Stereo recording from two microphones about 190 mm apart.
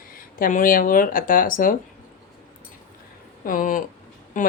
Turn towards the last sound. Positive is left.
turn(degrees=45)  # may be behind; listen again after turning